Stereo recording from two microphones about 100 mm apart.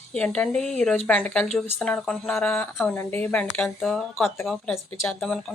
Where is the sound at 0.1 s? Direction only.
10° left (ahead or behind).